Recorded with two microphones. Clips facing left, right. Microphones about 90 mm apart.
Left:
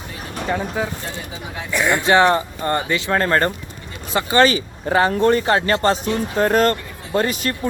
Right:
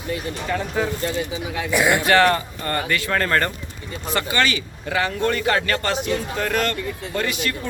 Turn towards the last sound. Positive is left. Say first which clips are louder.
# left 4 dB
turn(degrees=40)  # may be behind; listen again after turning